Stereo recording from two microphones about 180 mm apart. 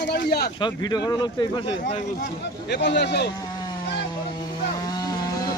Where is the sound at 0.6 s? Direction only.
25° left (ahead or behind).